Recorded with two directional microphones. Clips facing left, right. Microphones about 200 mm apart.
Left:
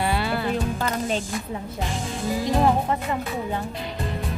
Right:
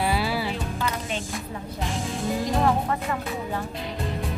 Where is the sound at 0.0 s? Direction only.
Centre (ahead or behind).